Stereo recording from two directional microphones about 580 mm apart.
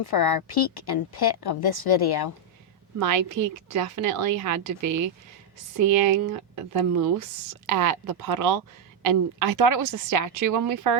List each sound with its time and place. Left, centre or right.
0.0 s a woman's voice: left
3.0 s a woman's voice: right
5.7 s a woman's voice: right